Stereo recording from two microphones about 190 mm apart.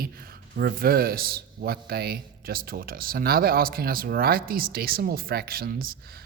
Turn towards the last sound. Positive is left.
turn(degrees=-50)  # may be behind; listen again after turning